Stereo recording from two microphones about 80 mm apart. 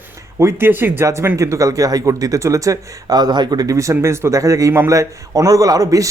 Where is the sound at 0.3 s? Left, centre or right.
Right.